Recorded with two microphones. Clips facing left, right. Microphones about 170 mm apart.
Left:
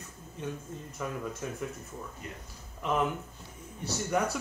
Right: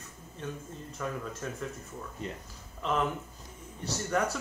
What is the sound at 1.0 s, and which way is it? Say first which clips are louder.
Speech: even; 10° left (ahead or behind).